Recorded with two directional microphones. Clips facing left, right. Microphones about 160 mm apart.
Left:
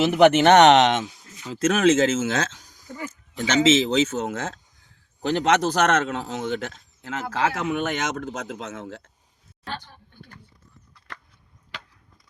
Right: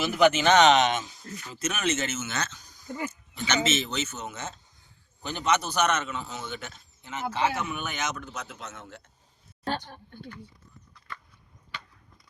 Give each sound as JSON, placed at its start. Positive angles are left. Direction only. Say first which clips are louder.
{"t": 0.0, "sound": "a man's voice", "louder": "left 6 dB", "side_deg": 65}
{"t": 9.6, "sound": "speech", "louder": "right 4 dB", "side_deg": -45}
{"t": 11.1, "sound": "chop", "louder": "even", "side_deg": 90}